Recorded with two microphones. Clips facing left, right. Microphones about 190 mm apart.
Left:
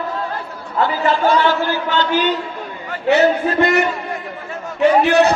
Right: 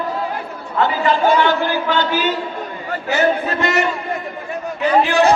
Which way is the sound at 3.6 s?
55° left (ahead or behind).